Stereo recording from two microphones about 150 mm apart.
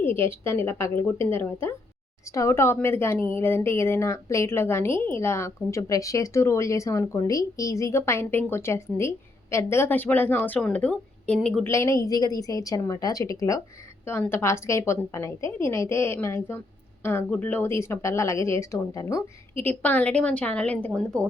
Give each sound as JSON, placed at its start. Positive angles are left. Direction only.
{"t": 0.0, "sound": "a woman's voice", "side_deg": 15}
{"t": 11.6, "sound": "a woman's voice", "side_deg": 20}